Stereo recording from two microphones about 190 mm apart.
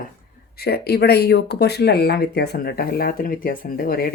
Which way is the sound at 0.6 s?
55° left (ahead or behind).